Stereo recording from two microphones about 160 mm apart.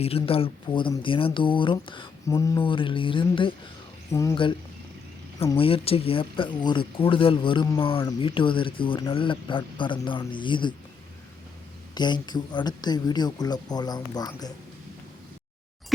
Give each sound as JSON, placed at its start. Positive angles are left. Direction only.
{"t": 0.2, "sound": "speech", "side_deg": 35}
{"t": 2.2, "sound": "speech", "side_deg": 20}
{"t": 2.6, "sound": "speech", "side_deg": 30}
{"t": 4.1, "sound": "speech", "side_deg": 20}
{"t": 5.5, "sound": "speech", "side_deg": 35}
{"t": 11.9, "sound": "speech", "side_deg": 25}